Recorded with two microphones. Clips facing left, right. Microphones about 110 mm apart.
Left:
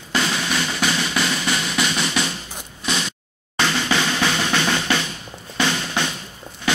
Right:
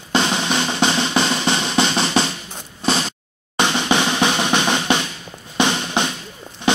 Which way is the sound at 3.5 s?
20° right (ahead or behind).